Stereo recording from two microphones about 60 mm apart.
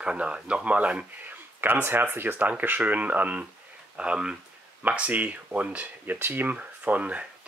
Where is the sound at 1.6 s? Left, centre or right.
Right.